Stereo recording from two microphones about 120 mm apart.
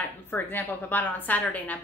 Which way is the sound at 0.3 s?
15° left (ahead or behind).